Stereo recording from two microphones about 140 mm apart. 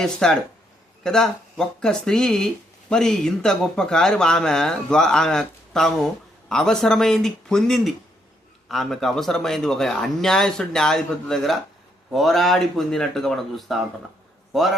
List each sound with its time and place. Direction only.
0.0 s a man's voice: 5° left (ahead or behind)